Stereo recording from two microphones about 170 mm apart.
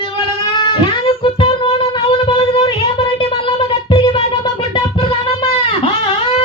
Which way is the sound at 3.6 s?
35° left (ahead or behind).